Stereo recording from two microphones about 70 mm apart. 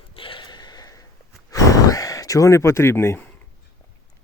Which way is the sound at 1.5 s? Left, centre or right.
Left.